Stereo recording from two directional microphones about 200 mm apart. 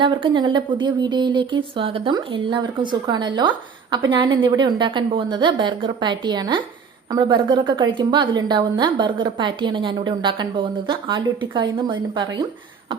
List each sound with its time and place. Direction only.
0.0 s a woman's voice: 25° right (ahead or behind)